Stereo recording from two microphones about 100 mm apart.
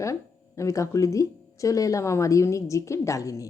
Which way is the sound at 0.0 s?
30° left (ahead or behind).